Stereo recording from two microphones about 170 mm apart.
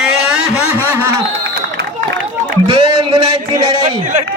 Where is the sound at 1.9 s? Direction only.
50° right (ahead or behind).